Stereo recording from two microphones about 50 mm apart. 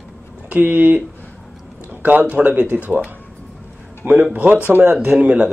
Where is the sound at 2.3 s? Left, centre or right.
Right.